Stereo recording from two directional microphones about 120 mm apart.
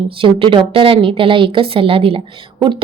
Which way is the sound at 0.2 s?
50° right (ahead or behind).